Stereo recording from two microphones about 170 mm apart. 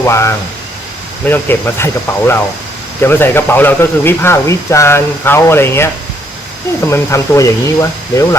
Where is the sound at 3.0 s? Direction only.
15° left (ahead or behind).